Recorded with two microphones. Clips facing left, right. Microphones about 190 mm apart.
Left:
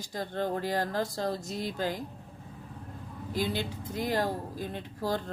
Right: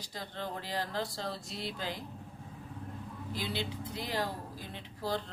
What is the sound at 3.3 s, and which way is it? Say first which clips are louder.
Speech: left 6 dB; 45° left (ahead or behind).